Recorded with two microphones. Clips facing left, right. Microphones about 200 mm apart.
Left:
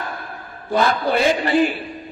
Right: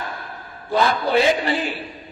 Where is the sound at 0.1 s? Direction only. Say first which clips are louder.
Left 2 dB; 50° left (ahead or behind).